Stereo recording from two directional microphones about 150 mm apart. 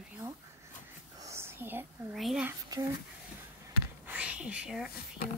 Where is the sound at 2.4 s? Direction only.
25° right (ahead or behind).